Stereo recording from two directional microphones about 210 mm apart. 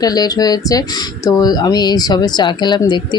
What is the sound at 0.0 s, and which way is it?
A man's voice, 20° left (ahead or behind).